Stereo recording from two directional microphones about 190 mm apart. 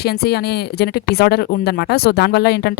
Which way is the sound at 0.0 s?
55° left (ahead or behind).